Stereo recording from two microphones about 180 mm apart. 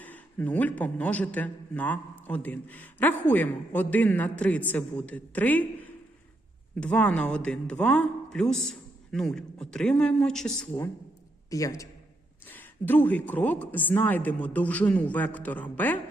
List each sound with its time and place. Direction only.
0.0 s a man's voice: 10° left (ahead or behind)
11.5 s a man's voice: 20° left (ahead or behind)